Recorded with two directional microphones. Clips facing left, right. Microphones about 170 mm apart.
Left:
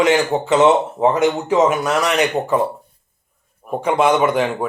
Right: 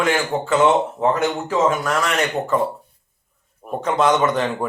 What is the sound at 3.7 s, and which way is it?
Speech, 10° left (ahead or behind).